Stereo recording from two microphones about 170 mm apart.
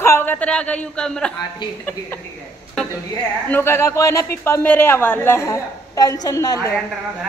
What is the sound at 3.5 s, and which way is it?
A woman's voice, 15° left (ahead or behind).